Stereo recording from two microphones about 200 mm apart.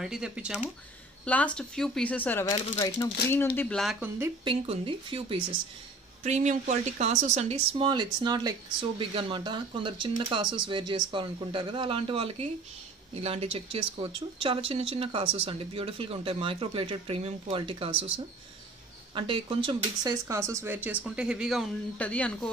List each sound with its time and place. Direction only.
0.0 s speech: 5° right (ahead or behind)
1.2 s speech: 5° left (ahead or behind)
4.5 s speech: 25° right (ahead or behind)
7.8 s speech: 25° right (ahead or behind)
19.1 s speech: 25° right (ahead or behind); by 22.5 s 5° left (ahead or behind)